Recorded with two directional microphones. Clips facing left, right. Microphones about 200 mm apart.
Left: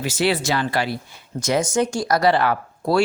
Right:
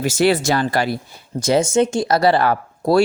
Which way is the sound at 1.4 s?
30° right (ahead or behind).